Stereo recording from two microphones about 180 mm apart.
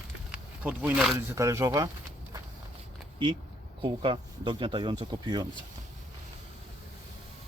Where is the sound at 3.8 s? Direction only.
30° right (ahead or behind).